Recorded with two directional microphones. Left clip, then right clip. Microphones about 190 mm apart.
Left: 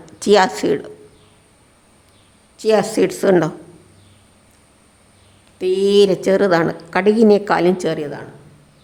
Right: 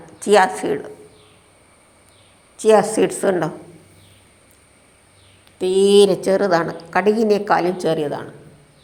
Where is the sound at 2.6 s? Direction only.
5° left (ahead or behind).